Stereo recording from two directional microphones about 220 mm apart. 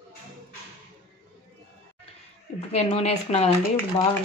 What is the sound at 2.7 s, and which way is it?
Speech, 30° left (ahead or behind).